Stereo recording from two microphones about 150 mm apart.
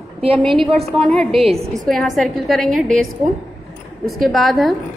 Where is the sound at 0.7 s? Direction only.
Centre (ahead or behind).